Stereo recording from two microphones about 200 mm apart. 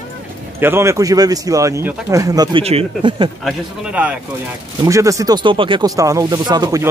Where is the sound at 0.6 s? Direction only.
10° right (ahead or behind).